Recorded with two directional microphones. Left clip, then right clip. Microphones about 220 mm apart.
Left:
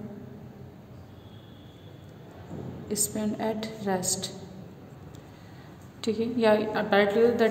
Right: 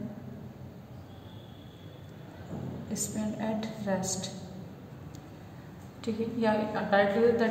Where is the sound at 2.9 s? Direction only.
45° left (ahead or behind).